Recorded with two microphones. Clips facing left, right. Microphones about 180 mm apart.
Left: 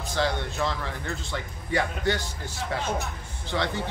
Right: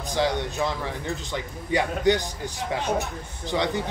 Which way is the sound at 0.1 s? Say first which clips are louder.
Right 3 dB; 15° right (ahead or behind).